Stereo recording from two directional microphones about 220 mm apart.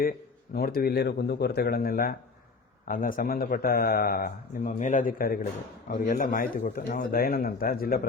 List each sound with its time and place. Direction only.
0.5 s a man's voice: 45° left (ahead or behind)